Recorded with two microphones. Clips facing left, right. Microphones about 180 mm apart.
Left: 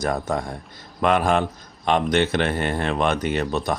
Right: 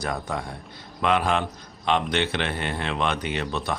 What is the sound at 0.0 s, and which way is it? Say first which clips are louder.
A man's voice: left 5 dB; 45° left (ahead or behind).